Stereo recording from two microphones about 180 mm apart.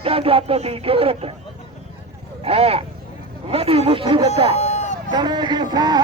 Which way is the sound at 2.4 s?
35° right (ahead or behind).